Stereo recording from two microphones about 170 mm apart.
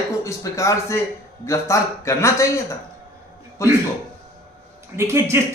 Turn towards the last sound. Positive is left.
turn(degrees=-15)  # may be behind; listen again after turning